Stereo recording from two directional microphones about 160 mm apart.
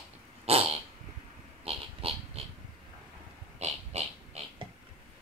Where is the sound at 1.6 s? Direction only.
40° right (ahead or behind).